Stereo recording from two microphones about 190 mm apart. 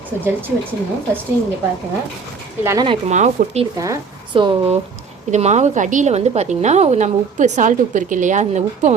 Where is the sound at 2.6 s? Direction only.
25° right (ahead or behind).